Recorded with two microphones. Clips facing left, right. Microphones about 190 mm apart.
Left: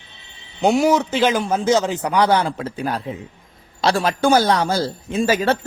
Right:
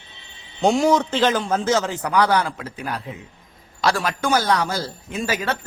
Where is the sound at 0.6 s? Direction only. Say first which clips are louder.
Left 1 dB; 5° left (ahead or behind).